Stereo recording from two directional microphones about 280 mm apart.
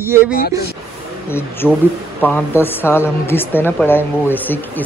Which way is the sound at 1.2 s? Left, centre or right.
Centre.